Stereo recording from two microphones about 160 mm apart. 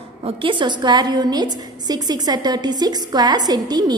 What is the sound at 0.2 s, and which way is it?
A woman's voice, 30° right (ahead or behind).